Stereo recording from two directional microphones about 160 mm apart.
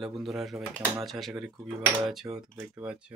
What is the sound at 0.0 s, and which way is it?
Speech, centre (ahead or behind).